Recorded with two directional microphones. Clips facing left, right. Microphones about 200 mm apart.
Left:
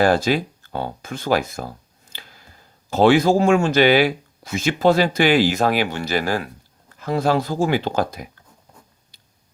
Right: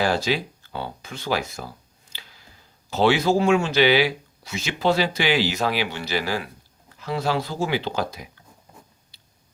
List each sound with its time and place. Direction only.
0.0 s speech: 50° left (ahead or behind)